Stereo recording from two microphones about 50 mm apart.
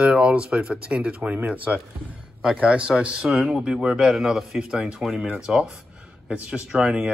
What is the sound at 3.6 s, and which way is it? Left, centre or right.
Speech, centre.